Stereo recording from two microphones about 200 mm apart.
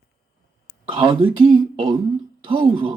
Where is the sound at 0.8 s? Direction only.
25° right (ahead or behind).